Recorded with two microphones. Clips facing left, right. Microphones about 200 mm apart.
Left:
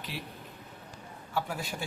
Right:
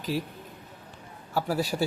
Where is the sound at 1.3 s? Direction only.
35° right (ahead or behind).